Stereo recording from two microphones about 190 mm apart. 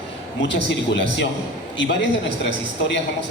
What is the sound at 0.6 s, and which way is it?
A man's voice, 70° left (ahead or behind).